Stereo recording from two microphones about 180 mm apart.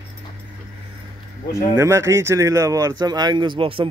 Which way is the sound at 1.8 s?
15° right (ahead or behind).